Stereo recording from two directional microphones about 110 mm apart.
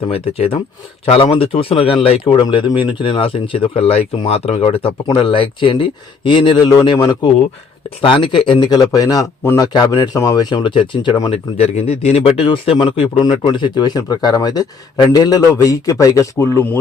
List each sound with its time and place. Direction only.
0.1 s speech: 60° left (ahead or behind)
5.1 s speech: 55° left (ahead or behind)
7.9 s speech: 50° left (ahead or behind)
11.5 s speech: 70° left (ahead or behind); by 16.5 s 30° left (ahead or behind)